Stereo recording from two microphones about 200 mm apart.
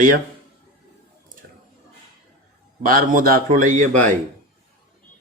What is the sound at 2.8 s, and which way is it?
A man's voice, 45° right (ahead or behind).